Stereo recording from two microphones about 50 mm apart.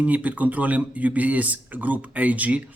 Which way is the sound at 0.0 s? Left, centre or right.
Right.